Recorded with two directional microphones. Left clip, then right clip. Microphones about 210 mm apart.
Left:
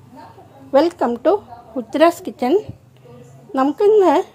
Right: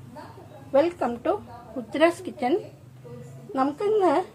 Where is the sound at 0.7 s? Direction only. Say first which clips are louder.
Left 7 dB; 50° left (ahead or behind).